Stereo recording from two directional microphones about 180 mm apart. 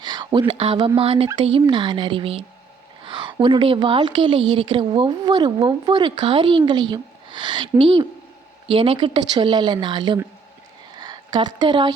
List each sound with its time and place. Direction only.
0.0 s a woman's voice: 25° right (ahead or behind)